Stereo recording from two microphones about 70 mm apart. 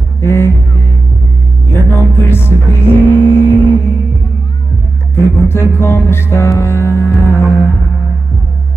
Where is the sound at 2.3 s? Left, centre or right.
Left.